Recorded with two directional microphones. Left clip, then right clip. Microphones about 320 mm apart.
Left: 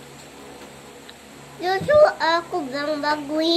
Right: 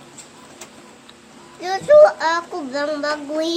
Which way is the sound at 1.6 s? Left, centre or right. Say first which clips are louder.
Right 4 dB; centre.